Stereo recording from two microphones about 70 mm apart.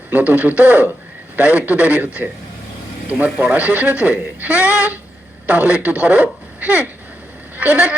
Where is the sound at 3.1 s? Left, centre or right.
Right.